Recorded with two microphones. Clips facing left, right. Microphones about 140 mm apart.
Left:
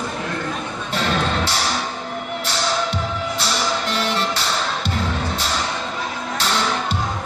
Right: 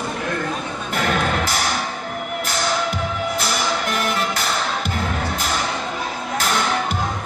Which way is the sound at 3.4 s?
30° left (ahead or behind).